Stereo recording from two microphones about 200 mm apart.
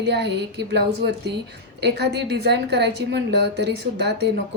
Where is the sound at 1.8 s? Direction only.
55° right (ahead or behind).